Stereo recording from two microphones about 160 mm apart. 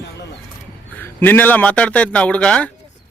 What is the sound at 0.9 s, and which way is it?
A man's voice, 10° left (ahead or behind).